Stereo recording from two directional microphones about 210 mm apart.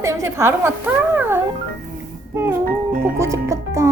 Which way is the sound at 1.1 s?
10° right (ahead or behind).